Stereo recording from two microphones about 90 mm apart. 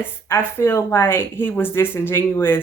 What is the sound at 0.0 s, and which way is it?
Speech, 25° left (ahead or behind).